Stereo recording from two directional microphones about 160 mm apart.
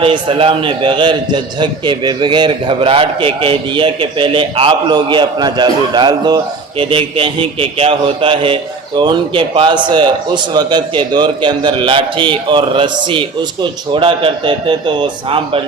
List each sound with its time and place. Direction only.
0.0 s a man's voice: 30° right (ahead or behind)